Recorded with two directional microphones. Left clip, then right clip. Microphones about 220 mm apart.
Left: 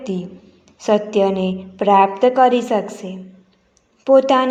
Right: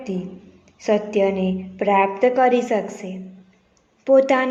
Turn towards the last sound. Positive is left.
turn(degrees=15)  # may be behind; listen again after turning